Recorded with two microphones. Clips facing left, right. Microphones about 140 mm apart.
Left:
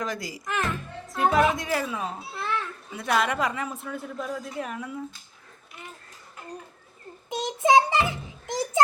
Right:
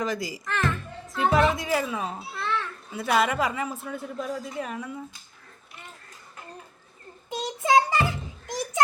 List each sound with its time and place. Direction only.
0.0 s a woman's voice: centre (ahead or behind)
7.3 s child singing: 20° left (ahead or behind)
8.4 s a sound: 25° left (ahead or behind)